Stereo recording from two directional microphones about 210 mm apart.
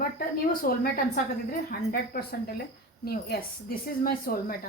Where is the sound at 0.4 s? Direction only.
40° left (ahead or behind).